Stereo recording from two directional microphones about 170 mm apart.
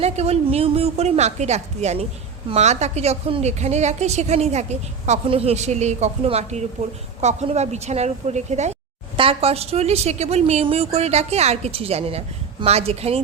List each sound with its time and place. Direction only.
0.0 s a woman's voice: 40° right (ahead or behind)